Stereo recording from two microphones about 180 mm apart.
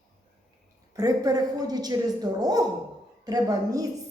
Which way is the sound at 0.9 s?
20° right (ahead or behind).